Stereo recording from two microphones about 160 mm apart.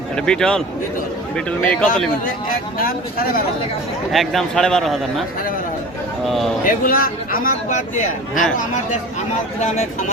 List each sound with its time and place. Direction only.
0.2 s a man's voice: 5° left (ahead or behind)
2.7 s a man's voice: 65° left (ahead or behind)
4.1 s a man's voice: centre (ahead or behind)
6.2 s a man's voice: centre (ahead or behind)
6.7 s a man's voice: 60° left (ahead or behind)
9.6 s speech: 45° left (ahead or behind)